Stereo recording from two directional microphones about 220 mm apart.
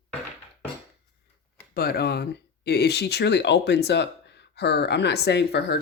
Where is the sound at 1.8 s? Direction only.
45° left (ahead or behind).